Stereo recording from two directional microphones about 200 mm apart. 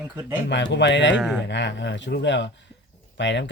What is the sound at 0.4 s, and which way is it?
Speech, 60° left (ahead or behind).